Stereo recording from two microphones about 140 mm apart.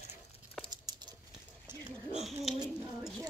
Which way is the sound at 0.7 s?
30° right (ahead or behind).